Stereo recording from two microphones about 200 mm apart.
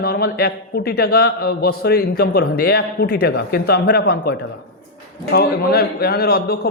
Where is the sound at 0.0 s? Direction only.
50° left (ahead or behind).